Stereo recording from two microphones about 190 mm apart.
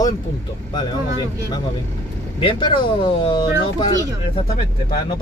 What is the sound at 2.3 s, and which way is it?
Speech, 25° left (ahead or behind).